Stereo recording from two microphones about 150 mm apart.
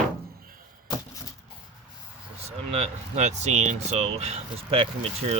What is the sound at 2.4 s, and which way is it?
Speech, 45° right (ahead or behind).